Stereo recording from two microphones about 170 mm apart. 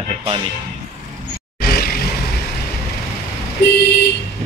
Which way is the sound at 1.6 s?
65° left (ahead or behind).